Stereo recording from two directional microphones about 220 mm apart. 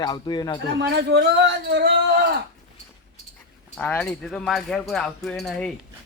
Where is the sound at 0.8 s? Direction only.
50° right (ahead or behind).